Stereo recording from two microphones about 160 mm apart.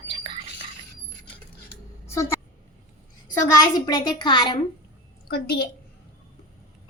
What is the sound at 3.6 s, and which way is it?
Speech, 25° left (ahead or behind).